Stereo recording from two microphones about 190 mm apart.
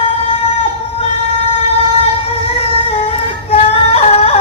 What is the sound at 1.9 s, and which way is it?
Singing, 30° left (ahead or behind).